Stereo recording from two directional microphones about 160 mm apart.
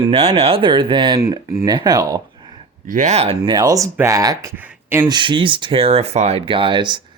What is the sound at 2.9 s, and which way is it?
Speech, 50° right (ahead or behind).